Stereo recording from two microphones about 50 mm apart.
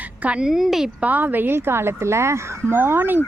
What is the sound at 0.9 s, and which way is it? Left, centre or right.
Speech, right.